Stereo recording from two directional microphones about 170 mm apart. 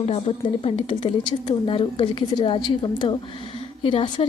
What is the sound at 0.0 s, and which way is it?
A woman's voice, 35° left (ahead or behind).